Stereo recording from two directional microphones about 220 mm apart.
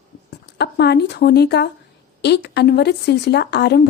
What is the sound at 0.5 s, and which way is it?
A woman's voice, 50° left (ahead or behind).